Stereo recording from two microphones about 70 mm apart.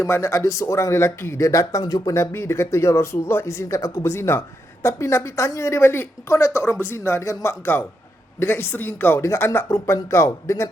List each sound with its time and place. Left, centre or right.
0.1 s speech: left
1.8 s speech: left
2.3 s speech: left